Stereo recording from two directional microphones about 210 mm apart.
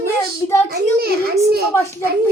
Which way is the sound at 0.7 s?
45° right (ahead or behind).